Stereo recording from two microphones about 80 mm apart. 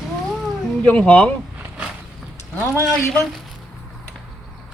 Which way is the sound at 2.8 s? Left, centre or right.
Centre.